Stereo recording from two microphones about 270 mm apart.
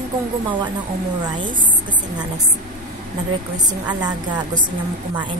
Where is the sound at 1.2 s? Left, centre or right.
Centre.